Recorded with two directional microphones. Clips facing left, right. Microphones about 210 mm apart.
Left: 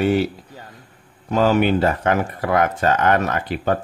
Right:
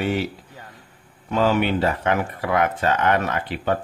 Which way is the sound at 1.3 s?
40° left (ahead or behind).